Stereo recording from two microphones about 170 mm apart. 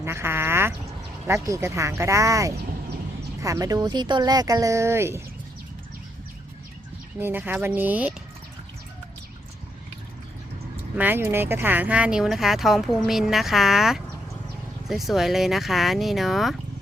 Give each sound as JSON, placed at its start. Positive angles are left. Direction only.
{"t": 0.0, "sound": "a sound", "side_deg": -15}
{"t": 1.3, "sound": "speech", "side_deg": -15}
{"t": 7.2, "sound": "speech", "side_deg": -10}
{"t": 10.9, "sound": "speech", "side_deg": -10}